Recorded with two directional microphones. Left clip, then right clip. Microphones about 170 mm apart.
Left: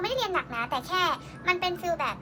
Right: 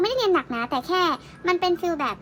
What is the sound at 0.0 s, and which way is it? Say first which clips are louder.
A child's voice: right 7 dB; 35° right (ahead or behind).